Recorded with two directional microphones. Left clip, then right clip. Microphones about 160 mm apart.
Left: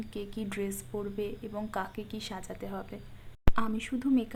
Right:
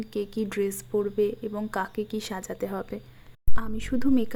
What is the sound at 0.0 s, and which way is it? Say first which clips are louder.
A woman's voice: right 9 dB; 25° right (ahead or behind).